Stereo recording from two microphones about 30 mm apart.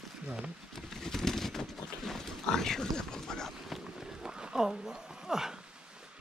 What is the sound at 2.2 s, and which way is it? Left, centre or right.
Pig, centre.